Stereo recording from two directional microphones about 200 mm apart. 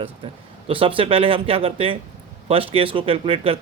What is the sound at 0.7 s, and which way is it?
Speech, 25° right (ahead or behind).